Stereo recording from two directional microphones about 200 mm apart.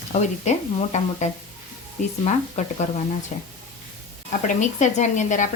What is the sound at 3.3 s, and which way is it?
Speech, 35° left (ahead or behind).